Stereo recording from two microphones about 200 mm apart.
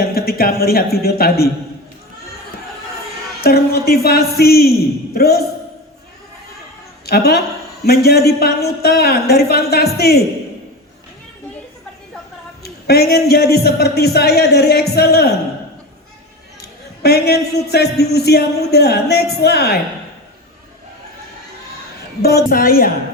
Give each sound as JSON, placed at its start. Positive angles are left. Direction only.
{"t": 0.0, "sound": "a man's voice", "side_deg": 50}
{"t": 3.4, "sound": "a man's voice", "side_deg": 50}
{"t": 7.0, "sound": "a woman's voice", "side_deg": 50}
{"t": 12.6, "sound": "a man's voice", "side_deg": 50}
{"t": 16.6, "sound": "a man's voice", "side_deg": 55}
{"t": 22.2, "sound": "a man's voice", "side_deg": 50}